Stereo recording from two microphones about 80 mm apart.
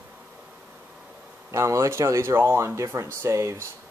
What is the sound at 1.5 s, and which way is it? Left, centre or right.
Speech, right.